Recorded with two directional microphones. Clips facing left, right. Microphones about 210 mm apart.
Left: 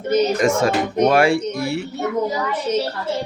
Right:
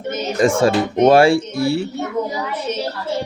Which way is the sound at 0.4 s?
30° right (ahead or behind).